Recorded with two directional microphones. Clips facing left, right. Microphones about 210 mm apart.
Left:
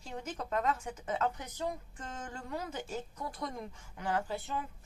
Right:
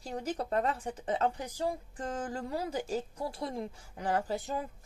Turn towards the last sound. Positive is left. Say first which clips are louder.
# right 3 dB
turn(degrees=-40)  # may be behind; listen again after turning